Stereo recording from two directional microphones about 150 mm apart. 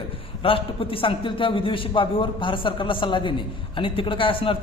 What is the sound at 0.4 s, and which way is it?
A man's voice, 35° left (ahead or behind).